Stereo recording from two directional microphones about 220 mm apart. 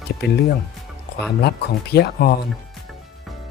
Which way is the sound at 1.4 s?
45° left (ahead or behind).